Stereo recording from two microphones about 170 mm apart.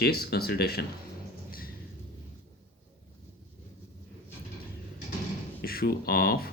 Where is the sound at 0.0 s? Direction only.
65° left (ahead or behind).